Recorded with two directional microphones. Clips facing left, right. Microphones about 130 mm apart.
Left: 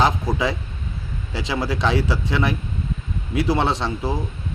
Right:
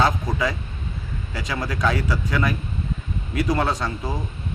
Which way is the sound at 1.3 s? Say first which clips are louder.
Left 3 dB; 30° left (ahead or behind).